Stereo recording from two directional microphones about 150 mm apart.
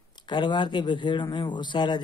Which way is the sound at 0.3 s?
30° left (ahead or behind).